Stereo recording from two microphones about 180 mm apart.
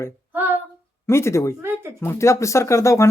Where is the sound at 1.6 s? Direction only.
15° right (ahead or behind).